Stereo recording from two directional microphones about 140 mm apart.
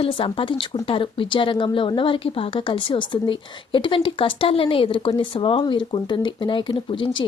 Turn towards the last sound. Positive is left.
turn(degrees=35)  # may be behind; listen again after turning